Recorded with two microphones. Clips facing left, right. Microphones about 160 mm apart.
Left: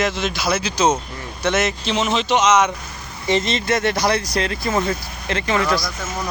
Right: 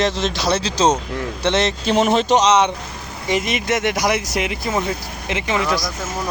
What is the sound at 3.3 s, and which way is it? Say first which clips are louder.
Speech: left 1 dB; 10° right (ahead or behind).